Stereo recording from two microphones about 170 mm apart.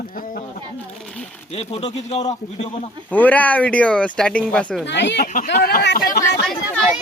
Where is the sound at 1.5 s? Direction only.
35° left (ahead or behind).